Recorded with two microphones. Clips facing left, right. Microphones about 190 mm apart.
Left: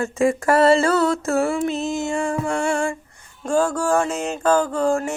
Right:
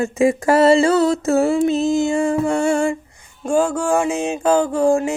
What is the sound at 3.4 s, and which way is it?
Mantra, 10° right (ahead or behind).